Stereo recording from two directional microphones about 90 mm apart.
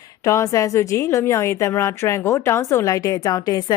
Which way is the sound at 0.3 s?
35° left (ahead or behind).